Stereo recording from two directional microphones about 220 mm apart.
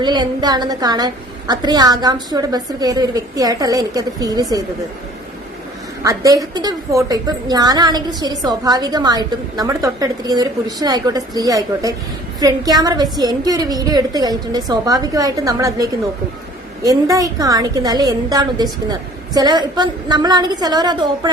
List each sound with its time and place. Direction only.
0.0 s a woman's voice: 20° right (ahead or behind)
6.0 s a woman's voice: 15° right (ahead or behind)